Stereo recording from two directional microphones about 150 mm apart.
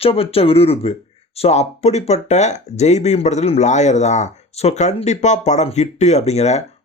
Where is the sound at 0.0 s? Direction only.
40° left (ahead or behind).